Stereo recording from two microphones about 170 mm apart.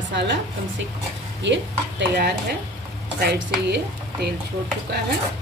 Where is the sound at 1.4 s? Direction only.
90° right.